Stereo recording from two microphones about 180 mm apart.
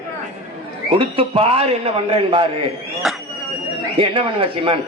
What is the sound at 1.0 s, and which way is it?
A man's voice, 30° right (ahead or behind).